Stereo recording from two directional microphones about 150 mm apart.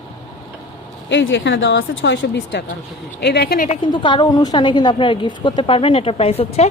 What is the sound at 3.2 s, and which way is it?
Speech, 90° left.